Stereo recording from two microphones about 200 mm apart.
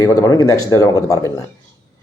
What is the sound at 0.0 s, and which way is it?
Mantra, 20° left (ahead or behind).